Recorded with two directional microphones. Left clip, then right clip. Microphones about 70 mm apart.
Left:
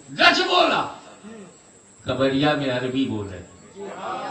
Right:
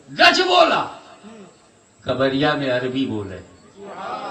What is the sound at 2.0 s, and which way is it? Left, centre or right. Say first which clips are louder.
A man's voice: right 2 dB; right.